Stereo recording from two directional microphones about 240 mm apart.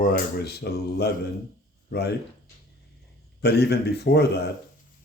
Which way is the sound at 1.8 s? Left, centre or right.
Left.